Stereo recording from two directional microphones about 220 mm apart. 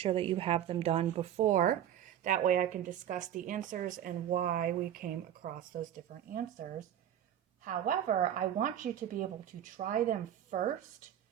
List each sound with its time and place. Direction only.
0.0 s speech: 25° right (ahead or behind)